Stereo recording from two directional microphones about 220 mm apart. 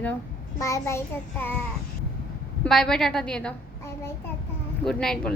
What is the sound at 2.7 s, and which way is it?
Speech, centre (ahead or behind).